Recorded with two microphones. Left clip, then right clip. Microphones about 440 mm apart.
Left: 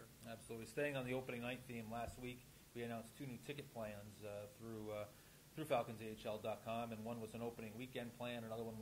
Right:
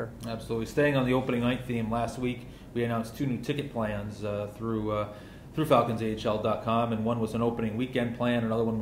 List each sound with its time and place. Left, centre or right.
0.3 s speech: left